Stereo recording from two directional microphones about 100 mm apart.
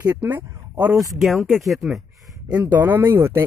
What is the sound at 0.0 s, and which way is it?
Speech, 20° right (ahead or behind).